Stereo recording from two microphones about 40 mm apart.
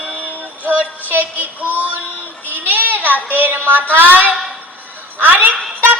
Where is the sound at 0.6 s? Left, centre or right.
Right.